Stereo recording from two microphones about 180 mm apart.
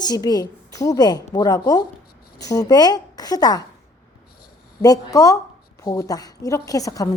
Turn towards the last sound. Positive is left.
turn(degrees=20)  # may be behind; listen again after turning